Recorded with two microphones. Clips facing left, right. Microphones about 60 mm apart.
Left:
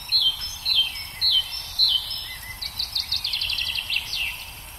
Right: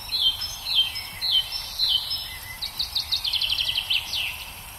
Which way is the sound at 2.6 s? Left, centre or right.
Left.